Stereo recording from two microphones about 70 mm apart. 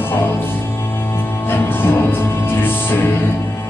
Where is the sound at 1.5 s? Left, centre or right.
Left.